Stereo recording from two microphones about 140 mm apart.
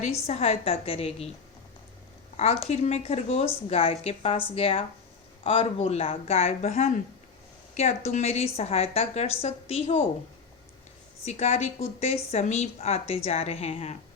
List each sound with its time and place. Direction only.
0.0 s a woman's voice: 50° left (ahead or behind)
2.3 s a woman's voice: 50° left (ahead or behind)
11.3 s a woman's voice: 50° left (ahead or behind)